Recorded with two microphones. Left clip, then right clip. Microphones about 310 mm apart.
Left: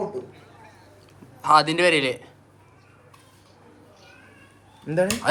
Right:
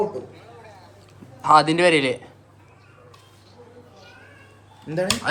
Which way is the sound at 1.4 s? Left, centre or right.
Centre.